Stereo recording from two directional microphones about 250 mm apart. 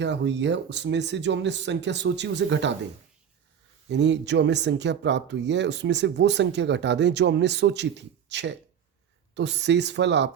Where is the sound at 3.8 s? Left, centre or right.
Right.